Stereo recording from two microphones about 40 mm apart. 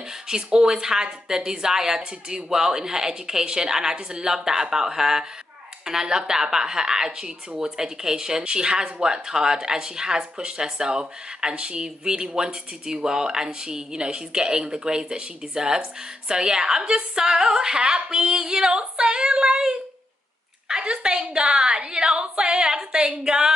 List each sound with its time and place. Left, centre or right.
0.3 s a woman's voice: centre
20.8 s speech: right